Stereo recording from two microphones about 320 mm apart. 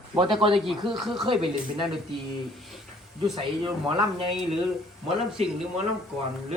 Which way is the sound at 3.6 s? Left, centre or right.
Centre.